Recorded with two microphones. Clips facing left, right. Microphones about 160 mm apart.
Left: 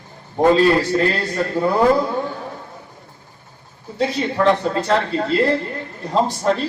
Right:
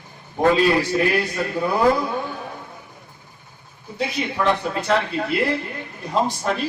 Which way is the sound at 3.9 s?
15° right (ahead or behind).